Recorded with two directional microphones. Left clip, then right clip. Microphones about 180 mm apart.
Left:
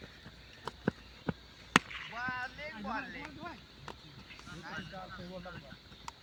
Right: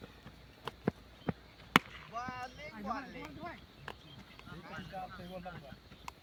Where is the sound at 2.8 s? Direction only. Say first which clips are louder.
Left 1 dB; 35° right (ahead or behind).